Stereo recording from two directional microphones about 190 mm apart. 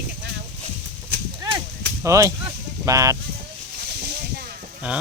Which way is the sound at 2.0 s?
15° right (ahead or behind).